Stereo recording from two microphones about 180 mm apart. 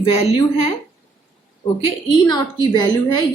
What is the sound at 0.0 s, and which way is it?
Speech, 35° left (ahead or behind).